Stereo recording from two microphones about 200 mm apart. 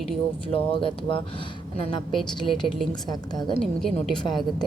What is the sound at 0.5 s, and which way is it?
Speech, 25° left (ahead or behind).